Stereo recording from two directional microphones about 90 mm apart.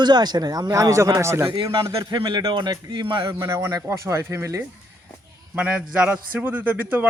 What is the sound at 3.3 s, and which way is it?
Speech, 30° right (ahead or behind).